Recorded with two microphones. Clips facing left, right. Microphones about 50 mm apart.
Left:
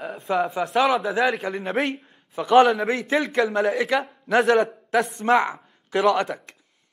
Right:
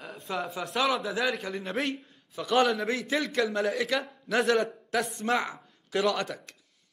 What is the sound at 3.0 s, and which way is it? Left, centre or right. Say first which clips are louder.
Speech: left 7 dB; left.